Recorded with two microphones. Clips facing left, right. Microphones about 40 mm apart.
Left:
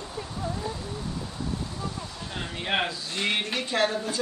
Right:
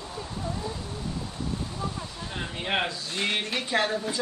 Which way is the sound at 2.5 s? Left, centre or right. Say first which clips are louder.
Left 1 dB; centre.